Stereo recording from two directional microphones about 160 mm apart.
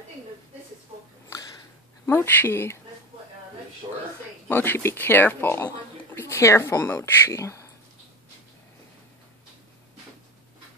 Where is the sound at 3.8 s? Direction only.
25° right (ahead or behind).